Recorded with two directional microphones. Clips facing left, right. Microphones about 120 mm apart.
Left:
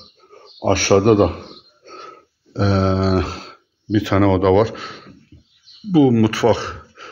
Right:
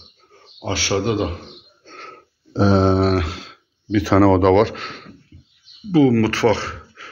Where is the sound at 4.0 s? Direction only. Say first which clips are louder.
Right 2 dB; 5° right (ahead or behind).